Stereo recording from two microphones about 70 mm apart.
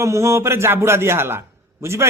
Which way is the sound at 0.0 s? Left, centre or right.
Right.